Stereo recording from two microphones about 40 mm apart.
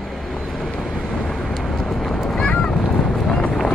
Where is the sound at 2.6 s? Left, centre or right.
Centre.